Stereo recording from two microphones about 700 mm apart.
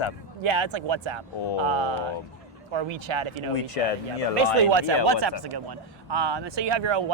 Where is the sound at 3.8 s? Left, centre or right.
Left.